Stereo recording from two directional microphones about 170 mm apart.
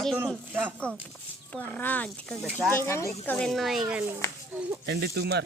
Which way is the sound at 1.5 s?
10° left (ahead or behind).